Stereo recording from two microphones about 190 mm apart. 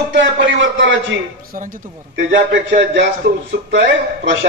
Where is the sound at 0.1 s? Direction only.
75° right (ahead or behind).